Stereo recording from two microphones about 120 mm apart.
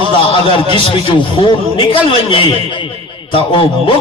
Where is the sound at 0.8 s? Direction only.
45° left (ahead or behind).